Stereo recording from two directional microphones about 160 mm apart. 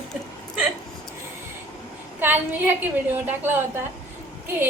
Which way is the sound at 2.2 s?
10° right (ahead or behind).